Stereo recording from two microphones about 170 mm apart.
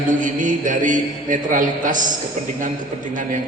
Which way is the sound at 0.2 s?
50° right (ahead or behind).